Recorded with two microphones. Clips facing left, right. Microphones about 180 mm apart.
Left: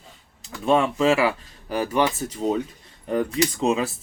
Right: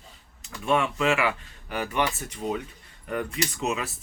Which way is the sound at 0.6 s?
30° left (ahead or behind).